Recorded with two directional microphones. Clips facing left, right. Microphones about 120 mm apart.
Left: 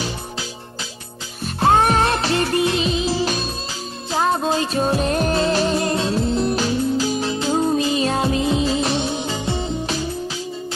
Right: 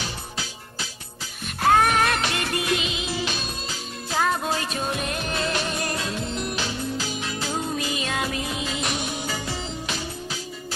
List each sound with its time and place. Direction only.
1.4 s music: 30° left (ahead or behind)